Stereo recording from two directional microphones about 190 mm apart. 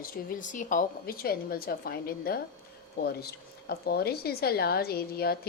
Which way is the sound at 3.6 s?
55° left (ahead or behind).